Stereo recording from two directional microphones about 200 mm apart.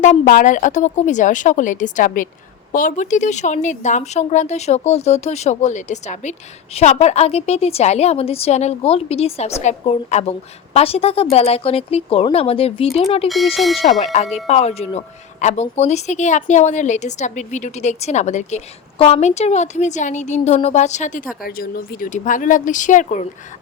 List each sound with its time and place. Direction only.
0.0 s a woman's voice: 40° left (ahead or behind)
13.2 s speech: centre (ahead or behind)
14.0 s a woman's voice: 35° left (ahead or behind)